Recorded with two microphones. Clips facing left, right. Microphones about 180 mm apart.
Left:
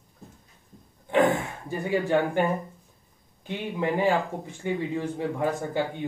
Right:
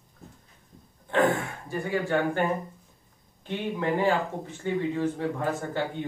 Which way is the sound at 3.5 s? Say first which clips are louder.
Even; 15° left (ahead or behind).